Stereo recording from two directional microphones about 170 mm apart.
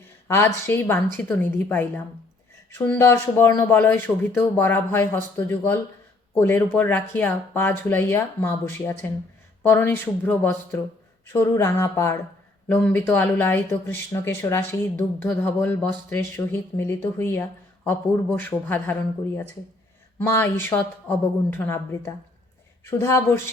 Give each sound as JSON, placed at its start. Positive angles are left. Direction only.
{"t": 0.3, "sound": "speech", "side_deg": 15}
{"t": 20.1, "sound": "speech", "side_deg": 10}